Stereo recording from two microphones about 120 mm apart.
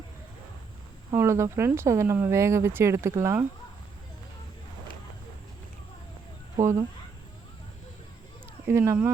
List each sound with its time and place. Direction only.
1.1 s speech: 20° right (ahead or behind)
6.6 s speech: 25° right (ahead or behind)
8.6 s speech: 20° right (ahead or behind)